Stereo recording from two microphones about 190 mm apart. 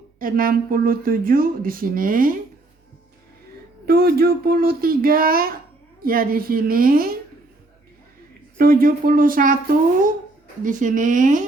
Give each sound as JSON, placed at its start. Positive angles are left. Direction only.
{"t": 0.2, "sound": "speech", "side_deg": -45}
{"t": 3.8, "sound": "speech", "side_deg": -55}
{"t": 8.5, "sound": "speech", "side_deg": -50}
{"t": 10.6, "sound": "speech", "side_deg": -45}